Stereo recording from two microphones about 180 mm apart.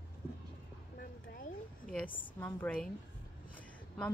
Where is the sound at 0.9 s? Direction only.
55° left (ahead or behind).